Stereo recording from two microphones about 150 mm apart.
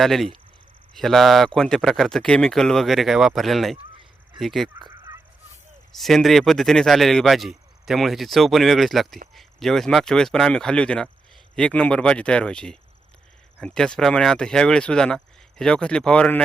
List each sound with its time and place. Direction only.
0.0 s a man's voice: centre (ahead or behind)
4.8 s fowl: 25° right (ahead or behind)
5.9 s a man's voice: centre (ahead or behind)